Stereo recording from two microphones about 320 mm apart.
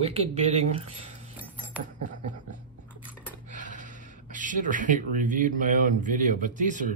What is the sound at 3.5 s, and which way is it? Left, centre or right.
Speech, right.